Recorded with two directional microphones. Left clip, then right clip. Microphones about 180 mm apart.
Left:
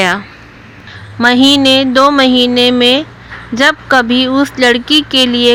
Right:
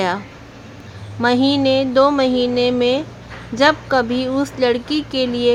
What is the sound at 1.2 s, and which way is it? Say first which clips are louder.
Speech: left 8 dB; 25° left (ahead or behind).